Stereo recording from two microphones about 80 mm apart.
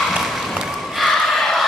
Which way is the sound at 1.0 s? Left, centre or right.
Centre.